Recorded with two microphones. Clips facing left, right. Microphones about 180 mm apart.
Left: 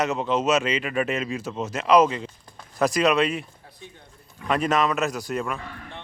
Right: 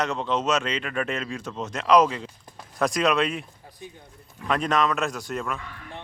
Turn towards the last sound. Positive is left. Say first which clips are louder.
# left 2 dB
turn(degrees=0)  # may be behind; listen again after turning